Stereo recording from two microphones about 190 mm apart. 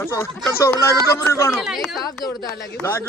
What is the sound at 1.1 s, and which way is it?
Speech, 15° left (ahead or behind).